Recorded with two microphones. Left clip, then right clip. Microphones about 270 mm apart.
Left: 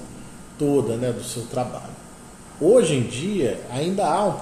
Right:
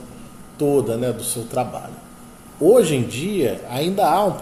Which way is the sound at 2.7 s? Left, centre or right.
Right.